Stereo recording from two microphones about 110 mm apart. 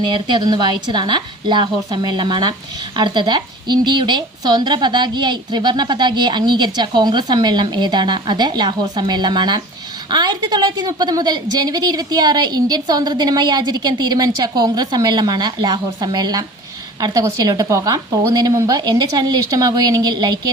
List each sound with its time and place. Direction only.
0.0 s a woman's voice: 45° right (ahead or behind)